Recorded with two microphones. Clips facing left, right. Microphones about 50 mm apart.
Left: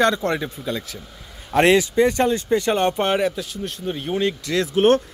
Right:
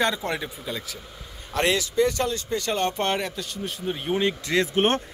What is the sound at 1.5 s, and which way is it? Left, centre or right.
Speech, left.